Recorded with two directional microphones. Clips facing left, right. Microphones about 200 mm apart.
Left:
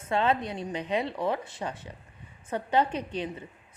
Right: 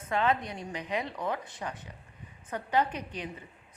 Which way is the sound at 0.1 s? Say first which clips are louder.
Left 2 dB; 25° left (ahead or behind).